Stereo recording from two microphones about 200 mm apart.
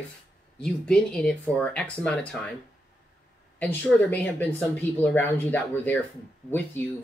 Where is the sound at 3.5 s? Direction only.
5° left (ahead or behind).